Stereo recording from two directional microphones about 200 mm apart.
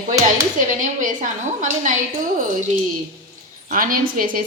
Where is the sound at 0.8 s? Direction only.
40° right (ahead or behind).